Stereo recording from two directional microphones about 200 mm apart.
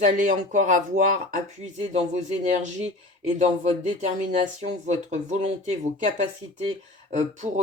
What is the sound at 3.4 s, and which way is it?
Speech, 35° right (ahead or behind).